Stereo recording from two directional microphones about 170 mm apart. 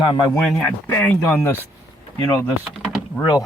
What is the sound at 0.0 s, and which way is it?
Speech, 25° left (ahead or behind).